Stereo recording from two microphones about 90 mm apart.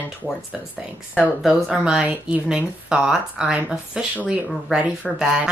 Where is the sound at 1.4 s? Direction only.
5° right (ahead or behind).